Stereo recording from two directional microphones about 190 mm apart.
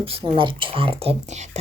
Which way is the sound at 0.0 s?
25° right (ahead or behind).